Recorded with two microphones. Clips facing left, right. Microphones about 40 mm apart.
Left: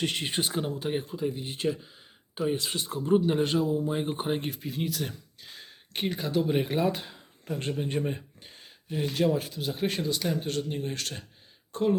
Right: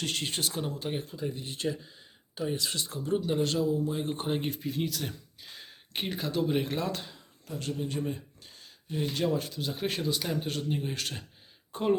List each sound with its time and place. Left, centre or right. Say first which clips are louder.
0.0 s speech: left 3 dB; left
4.4 s speech: right 1 dB; centre
7.4 s speech: left 3 dB; left
8.4 s a sound: left 2 dB; left
8.9 s speech: left 3 dB; centre
11.7 s speech: left 1 dB; centre